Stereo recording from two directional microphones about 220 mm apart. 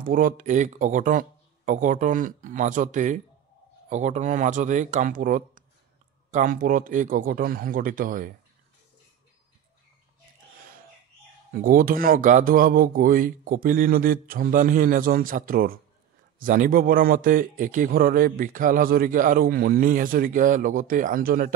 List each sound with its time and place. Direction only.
0.0 s a man's voice: 40° right (ahead or behind)
11.6 s a man's voice: 40° right (ahead or behind)